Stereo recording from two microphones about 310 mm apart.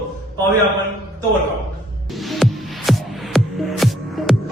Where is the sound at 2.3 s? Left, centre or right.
Centre.